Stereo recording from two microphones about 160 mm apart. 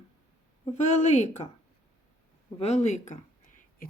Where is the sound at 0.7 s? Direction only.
45° left (ahead or behind).